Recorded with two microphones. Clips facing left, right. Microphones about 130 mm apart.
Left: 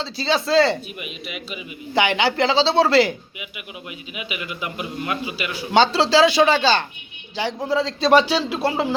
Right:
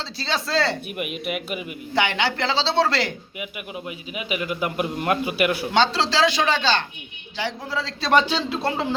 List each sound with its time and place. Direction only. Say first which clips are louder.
0.0 s speech: left 5 dB; centre (ahead or behind)
0.9 s speech: right 6 dB; 55° right (ahead or behind)
2.0 s a man's voice: left 4 dB; 5° left (ahead or behind)
3.8 s a man's voice: right 2 dB; 40° right (ahead or behind); by 5.6 s 55° right (ahead or behind)
5.7 s a man's voice: left 8 dB; 5° left (ahead or behind)
7.3 s speech: left 6 dB; 20° left (ahead or behind)
8.3 s a man's voice: left 3 dB; 10° left (ahead or behind)